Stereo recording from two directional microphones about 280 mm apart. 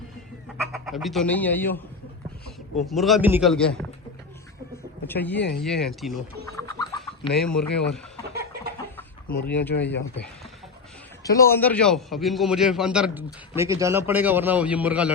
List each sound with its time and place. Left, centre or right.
0.4 s speech: centre
2.8 s a man's voice: centre
5.0 s speech: centre
5.4 s speech: left
5.6 s a man's voice: centre
6.6 s chicken: centre
7.3 s a man's voice: centre
9.0 s chicken: centre
11.2 s a man's voice: centre